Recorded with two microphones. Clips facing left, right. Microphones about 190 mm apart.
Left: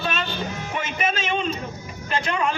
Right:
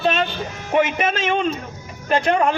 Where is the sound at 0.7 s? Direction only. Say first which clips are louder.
Right 9 dB; 55° right (ahead or behind).